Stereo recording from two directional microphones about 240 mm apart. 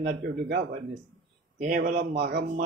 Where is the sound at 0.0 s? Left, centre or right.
Right.